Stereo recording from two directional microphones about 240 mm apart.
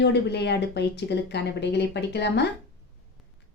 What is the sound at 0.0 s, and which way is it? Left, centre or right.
Speech, left.